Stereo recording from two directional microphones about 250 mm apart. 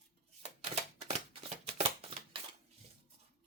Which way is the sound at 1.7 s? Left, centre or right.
Right.